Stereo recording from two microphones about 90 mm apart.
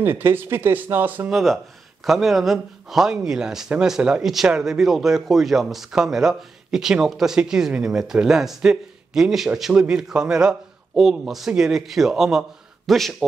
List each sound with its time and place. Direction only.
0.0 s speech: 25° right (ahead or behind)
1.3 s a man's voice: centre (ahead or behind)